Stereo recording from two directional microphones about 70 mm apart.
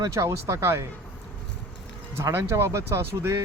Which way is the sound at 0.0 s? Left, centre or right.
Right.